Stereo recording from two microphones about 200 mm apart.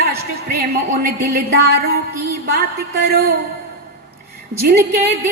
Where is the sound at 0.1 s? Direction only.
50° right (ahead or behind).